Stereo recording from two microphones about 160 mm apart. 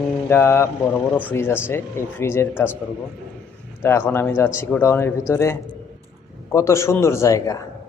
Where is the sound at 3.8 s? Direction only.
15° left (ahead or behind).